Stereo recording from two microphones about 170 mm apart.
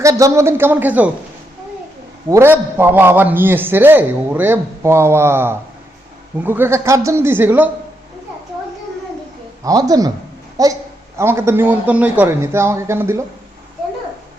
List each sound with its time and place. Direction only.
0.0 s a man's voice: 20° right (ahead or behind)
2.3 s a man's voice: 15° right (ahead or behind)
9.6 s a man's voice: 20° right (ahead or behind)